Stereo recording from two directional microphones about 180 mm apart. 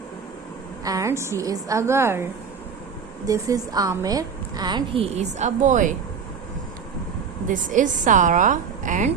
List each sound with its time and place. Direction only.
0.9 s a woman's voice: 15° right (ahead or behind)
3.2 s a woman's voice: 20° right (ahead or behind); by 5.9 s 45° right (ahead or behind)
7.4 s a woman's voice: 45° right (ahead or behind)